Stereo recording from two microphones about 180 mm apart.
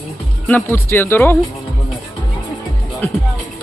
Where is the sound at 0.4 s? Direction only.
10° left (ahead or behind).